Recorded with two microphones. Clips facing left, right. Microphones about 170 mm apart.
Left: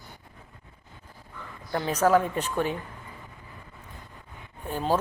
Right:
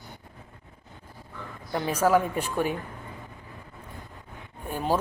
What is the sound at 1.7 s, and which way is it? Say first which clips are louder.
A man's voice: even; 10° right (ahead or behind).